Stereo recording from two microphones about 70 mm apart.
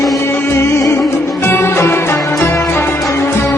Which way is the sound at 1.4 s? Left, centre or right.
Left.